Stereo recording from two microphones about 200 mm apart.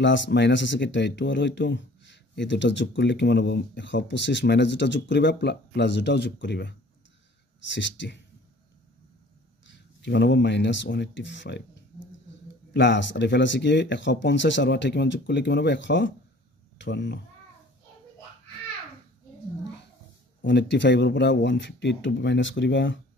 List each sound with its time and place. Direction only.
0.0 s speech: 65° left (ahead or behind)
9.7 s speech: 60° left (ahead or behind)
12.7 s speech: 60° left (ahead or behind)
20.4 s speech: 60° left (ahead or behind)